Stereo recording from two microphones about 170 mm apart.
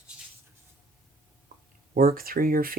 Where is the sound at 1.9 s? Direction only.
60° right (ahead or behind).